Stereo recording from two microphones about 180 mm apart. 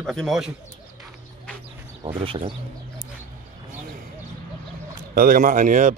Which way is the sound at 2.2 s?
30° right (ahead or behind).